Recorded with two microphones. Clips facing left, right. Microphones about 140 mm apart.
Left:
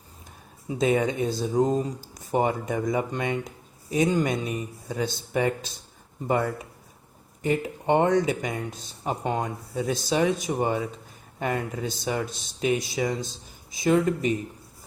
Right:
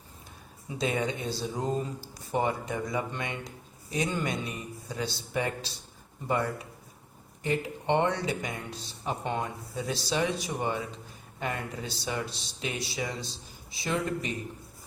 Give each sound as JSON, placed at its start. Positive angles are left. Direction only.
{"t": 0.8, "sound": "speech", "side_deg": 45}